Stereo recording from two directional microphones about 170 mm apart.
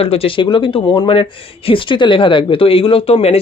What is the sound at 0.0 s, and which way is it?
Speech, 35° left (ahead or behind).